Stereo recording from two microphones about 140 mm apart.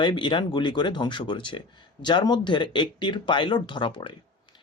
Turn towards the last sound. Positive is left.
turn(degrees=35)  # may be behind; listen again after turning